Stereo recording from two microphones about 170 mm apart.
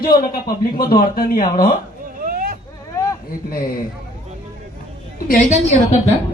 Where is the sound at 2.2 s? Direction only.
55° right (ahead or behind).